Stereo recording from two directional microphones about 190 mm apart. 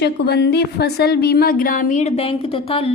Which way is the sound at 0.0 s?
60° left (ahead or behind).